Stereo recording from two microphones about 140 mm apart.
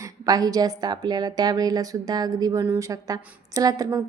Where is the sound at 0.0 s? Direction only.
25° right (ahead or behind).